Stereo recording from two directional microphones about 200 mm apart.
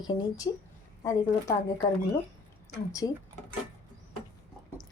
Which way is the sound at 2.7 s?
15° left (ahead or behind).